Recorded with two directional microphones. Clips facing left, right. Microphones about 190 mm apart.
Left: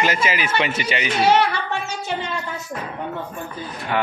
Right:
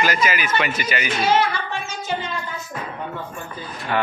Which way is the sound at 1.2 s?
70° left (ahead or behind).